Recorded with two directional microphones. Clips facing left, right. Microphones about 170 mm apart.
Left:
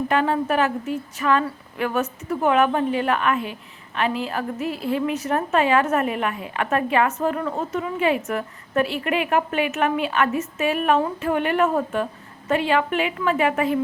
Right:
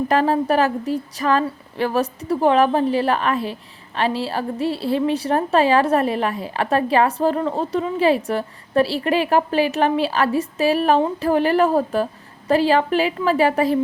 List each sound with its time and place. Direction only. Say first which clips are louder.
0.1 s speech: right 4 dB; 35° right (ahead or behind)